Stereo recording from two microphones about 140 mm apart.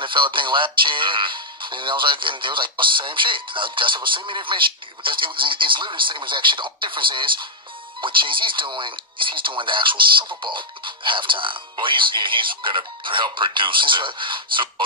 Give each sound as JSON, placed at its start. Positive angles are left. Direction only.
{"t": 0.0, "sound": "speech", "side_deg": -35}